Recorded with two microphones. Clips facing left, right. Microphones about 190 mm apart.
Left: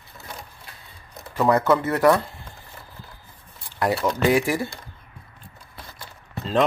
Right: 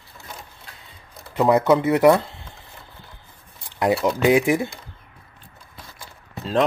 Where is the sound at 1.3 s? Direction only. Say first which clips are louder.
Right 2 dB; 20° right (ahead or behind).